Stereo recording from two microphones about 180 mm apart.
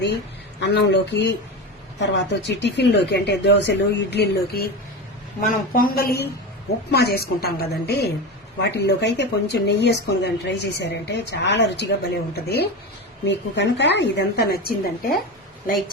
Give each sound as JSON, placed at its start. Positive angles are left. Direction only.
{"t": 0.6, "sound": "speech", "side_deg": 70}
{"t": 5.5, "sound": "a woman's voice", "side_deg": 50}
{"t": 13.2, "sound": "speech", "side_deg": 75}